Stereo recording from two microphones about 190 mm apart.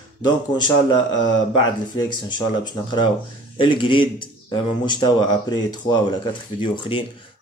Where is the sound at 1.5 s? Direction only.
25° left (ahead or behind).